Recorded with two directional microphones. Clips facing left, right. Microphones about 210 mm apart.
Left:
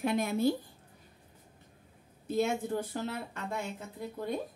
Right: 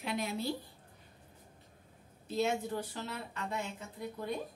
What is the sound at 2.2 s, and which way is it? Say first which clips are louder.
Speech: left 3 dB; 50° left (ahead or behind).